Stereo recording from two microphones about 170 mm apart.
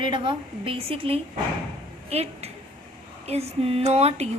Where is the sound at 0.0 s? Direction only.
30° right (ahead or behind).